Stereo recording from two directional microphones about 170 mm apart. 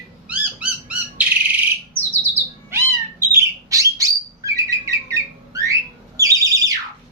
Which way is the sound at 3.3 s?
15° right (ahead or behind).